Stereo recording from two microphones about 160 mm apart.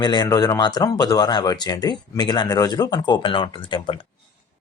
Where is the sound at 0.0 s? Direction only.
25° left (ahead or behind).